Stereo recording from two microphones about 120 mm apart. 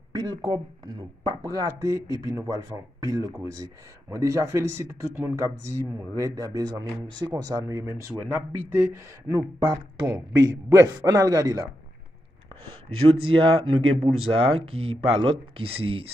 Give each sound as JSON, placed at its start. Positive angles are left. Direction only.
{"t": 0.1, "sound": "speech", "side_deg": -40}
{"t": 1.3, "sound": "a man's voice", "side_deg": -25}
{"t": 6.1, "sound": "a man's voice", "side_deg": -30}
{"t": 9.6, "sound": "a man's voice", "side_deg": -35}
{"t": 13.3, "sound": "speech", "side_deg": -45}